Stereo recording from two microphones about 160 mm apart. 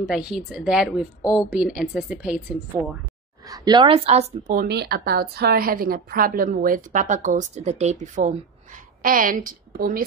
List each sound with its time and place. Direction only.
0.0 s a woman's voice: 5° right (ahead or behind)
3.4 s a woman's voice: 25° right (ahead or behind); by 4.6 s 45° right (ahead or behind)
4.6 s a woman's voice: 85° right; by 8.3 s 45° right (ahead or behind)
9.0 s a woman's voice: 60° right (ahead or behind)